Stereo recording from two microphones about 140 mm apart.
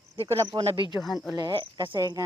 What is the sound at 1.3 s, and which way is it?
Cricket, 35° right (ahead or behind).